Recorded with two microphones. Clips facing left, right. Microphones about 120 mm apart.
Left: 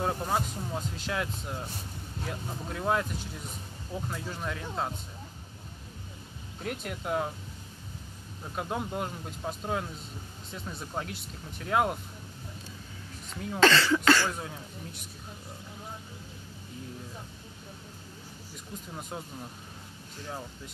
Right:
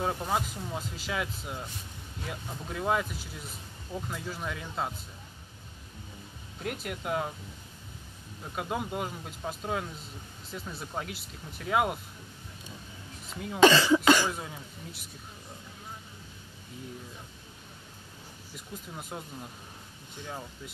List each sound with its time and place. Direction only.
0.0 s speech: centre (ahead or behind)
6.6 s speech: 5° right (ahead or behind)
8.5 s speech: 5° right (ahead or behind)
13.3 s speech: 5° right (ahead or behind)
13.6 s speech: 15° right (ahead or behind)
14.3 s speech: 5° right (ahead or behind)
18.9 s speech: 5° right (ahead or behind)
20.2 s speech: centre (ahead or behind)